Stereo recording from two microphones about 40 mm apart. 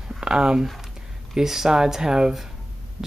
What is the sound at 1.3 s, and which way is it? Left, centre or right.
Speech, centre.